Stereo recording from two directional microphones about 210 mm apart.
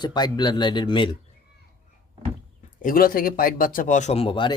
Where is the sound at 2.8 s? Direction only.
40° left (ahead or behind); by 4.5 s 25° left (ahead or behind).